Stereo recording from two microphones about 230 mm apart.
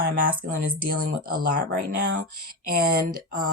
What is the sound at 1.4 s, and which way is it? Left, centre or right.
Speech, right.